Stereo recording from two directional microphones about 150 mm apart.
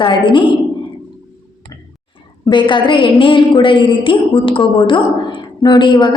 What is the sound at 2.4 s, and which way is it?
A woman's voice, 30° left (ahead or behind).